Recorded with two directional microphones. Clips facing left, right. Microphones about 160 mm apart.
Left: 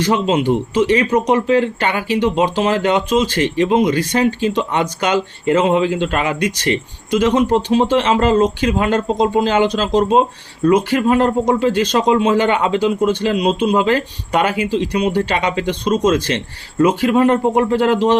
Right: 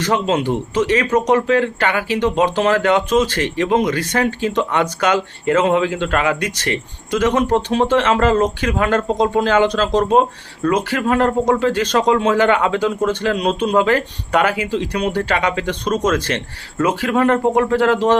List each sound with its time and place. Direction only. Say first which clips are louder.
0.0 s a man's voice: left 2 dB; 15° left (ahead or behind)